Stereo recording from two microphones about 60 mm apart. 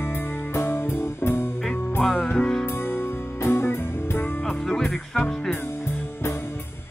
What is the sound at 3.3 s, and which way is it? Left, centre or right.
Music, left.